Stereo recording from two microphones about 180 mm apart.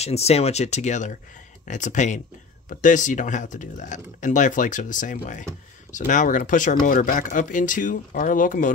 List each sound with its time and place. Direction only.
0.0 s speech: 35° left (ahead or behind)